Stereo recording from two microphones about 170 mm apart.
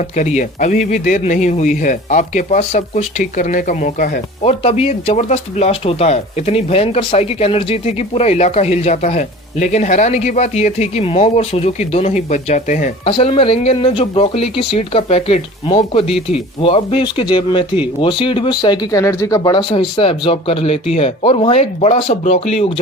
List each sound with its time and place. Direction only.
0.2 s a man's voice: 45° left (ahead or behind)
4.4 s speech: 35° left (ahead or behind)
13.1 s speech: 30° left (ahead or behind)
16.0 s speech: centre (ahead or behind)
16.6 s speech: 35° left (ahead or behind)